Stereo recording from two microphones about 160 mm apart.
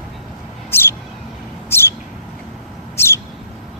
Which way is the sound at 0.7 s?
15° left (ahead or behind).